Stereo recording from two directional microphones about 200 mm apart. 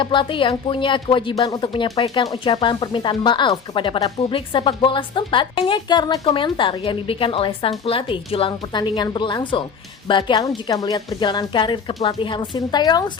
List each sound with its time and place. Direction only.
0.0 s speech: 25° left (ahead or behind)